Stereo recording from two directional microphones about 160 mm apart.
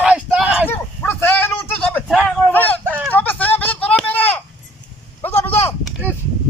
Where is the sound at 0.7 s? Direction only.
15° left (ahead or behind).